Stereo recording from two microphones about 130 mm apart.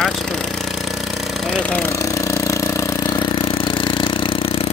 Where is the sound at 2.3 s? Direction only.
25° left (ahead or behind).